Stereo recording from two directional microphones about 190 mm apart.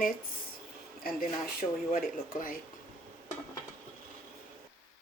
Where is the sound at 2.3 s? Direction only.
45° left (ahead or behind).